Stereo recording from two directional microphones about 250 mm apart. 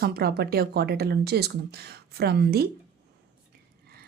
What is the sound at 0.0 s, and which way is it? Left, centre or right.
Speech, right.